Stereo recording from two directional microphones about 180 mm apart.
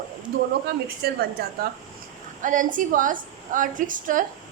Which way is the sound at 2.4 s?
45° right (ahead or behind).